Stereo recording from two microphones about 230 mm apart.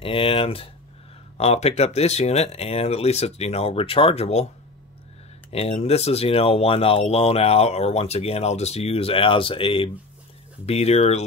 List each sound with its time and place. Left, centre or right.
0.0 s speech: left
5.5 s speech: left